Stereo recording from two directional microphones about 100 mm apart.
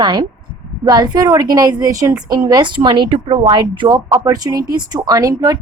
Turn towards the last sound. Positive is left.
turn(degrees=-35)  # may be behind; listen again after turning